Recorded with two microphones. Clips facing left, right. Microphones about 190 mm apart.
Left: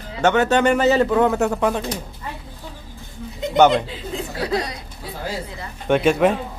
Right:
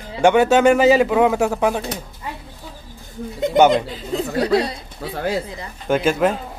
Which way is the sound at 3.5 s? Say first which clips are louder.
Right 1 dB; 10° right (ahead or behind).